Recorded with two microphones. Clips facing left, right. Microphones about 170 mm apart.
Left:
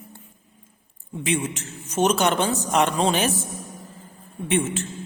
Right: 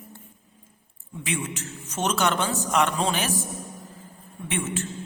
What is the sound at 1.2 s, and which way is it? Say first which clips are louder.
A man's voice: left 5 dB; 20° left (ahead or behind).